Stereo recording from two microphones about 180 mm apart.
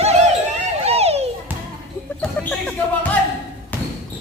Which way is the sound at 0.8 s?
35° right (ahead or behind).